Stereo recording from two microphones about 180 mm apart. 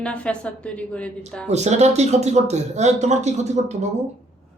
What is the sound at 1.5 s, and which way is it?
Speech, 40° right (ahead or behind).